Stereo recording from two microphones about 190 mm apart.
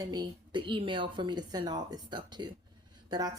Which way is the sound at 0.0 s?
20° right (ahead or behind).